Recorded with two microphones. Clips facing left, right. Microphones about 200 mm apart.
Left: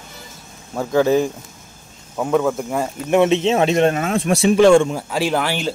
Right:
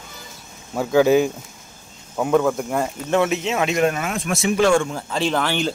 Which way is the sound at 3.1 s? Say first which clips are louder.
Left 5 dB; 25° left (ahead or behind).